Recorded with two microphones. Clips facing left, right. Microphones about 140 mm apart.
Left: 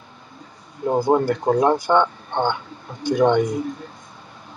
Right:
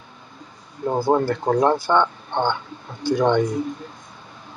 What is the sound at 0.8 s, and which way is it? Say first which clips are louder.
Speech: left 1 dB; 15° left (ahead or behind).